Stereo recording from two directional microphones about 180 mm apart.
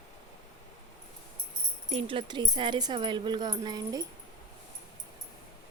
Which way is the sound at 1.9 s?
30° right (ahead or behind).